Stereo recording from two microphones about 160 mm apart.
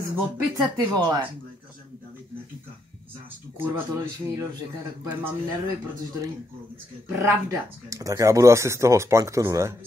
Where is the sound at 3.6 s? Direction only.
15° right (ahead or behind).